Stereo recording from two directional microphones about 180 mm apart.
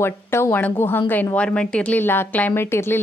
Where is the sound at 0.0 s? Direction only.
15° left (ahead or behind).